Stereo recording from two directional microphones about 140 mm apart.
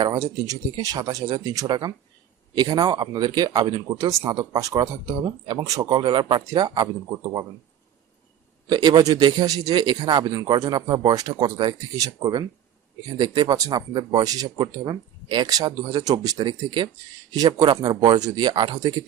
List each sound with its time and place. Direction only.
0.0 s speech: 30° right (ahead or behind)
8.7 s speech: 30° right (ahead or behind)